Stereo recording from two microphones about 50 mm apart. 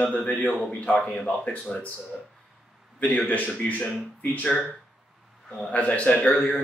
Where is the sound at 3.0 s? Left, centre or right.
Left.